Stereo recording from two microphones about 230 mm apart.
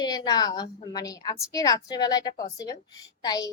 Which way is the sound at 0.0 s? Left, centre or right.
Centre.